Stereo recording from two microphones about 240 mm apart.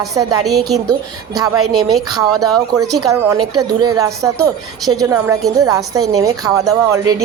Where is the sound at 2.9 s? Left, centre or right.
Centre.